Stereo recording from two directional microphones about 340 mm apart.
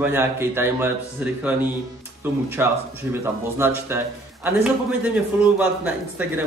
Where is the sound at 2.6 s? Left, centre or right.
Centre.